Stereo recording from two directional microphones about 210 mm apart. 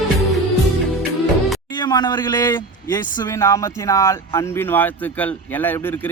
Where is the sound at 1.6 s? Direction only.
20° left (ahead or behind).